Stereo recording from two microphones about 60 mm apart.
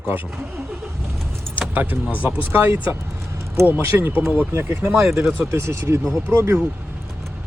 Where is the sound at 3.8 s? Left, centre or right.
Right.